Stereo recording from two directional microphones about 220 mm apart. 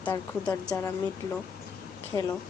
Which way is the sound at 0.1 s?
5° left (ahead or behind).